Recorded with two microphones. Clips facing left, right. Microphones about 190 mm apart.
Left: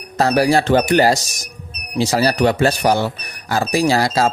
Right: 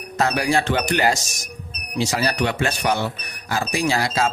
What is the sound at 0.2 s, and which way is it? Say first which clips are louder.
Speech: left 6 dB; 35° left (ahead or behind).